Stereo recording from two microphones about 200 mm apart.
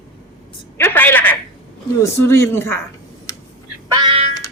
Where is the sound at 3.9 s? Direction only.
20° right (ahead or behind).